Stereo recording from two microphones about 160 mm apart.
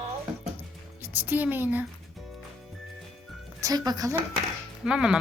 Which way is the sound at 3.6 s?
25° right (ahead or behind).